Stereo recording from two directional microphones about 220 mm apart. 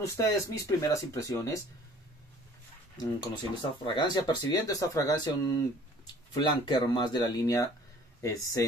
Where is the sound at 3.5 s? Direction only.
20° left (ahead or behind).